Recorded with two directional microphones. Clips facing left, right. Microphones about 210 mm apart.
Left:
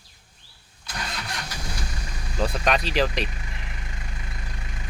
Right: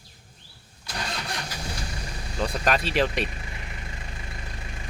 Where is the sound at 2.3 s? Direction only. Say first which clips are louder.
Left 1 dB; centre (ahead or behind).